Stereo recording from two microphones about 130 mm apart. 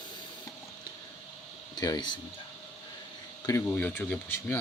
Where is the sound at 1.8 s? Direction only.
30° left (ahead or behind).